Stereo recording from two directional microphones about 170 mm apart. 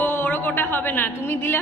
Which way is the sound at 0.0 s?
10° left (ahead or behind).